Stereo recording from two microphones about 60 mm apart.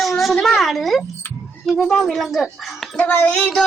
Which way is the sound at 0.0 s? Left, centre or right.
Centre.